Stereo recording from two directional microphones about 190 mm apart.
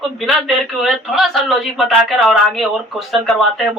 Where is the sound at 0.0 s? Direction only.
Centre (ahead or behind).